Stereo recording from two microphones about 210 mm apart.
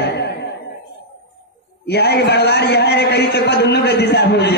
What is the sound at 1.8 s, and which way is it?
A man's voice, 50° left (ahead or behind).